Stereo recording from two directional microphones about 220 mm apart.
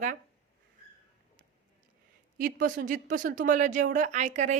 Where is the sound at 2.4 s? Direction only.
35° right (ahead or behind).